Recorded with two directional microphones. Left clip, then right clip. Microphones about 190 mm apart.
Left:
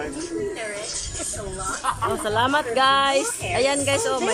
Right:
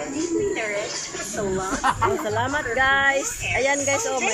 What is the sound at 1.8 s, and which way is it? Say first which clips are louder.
Speech: right 3 dB; 70° right (ahead or behind).